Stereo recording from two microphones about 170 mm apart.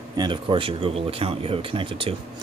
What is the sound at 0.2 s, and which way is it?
Speech, 30° right (ahead or behind).